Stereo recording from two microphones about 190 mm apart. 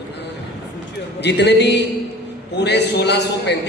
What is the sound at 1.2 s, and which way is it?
A man's voice, 65° left (ahead or behind).